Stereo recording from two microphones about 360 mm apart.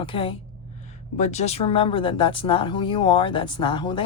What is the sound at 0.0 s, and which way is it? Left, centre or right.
Speech, centre.